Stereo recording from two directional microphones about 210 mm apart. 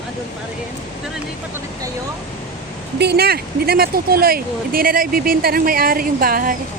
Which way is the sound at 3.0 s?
50° right (ahead or behind).